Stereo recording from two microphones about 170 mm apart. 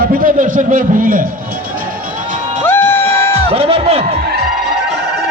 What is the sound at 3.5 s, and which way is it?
Speech, 35° right (ahead or behind).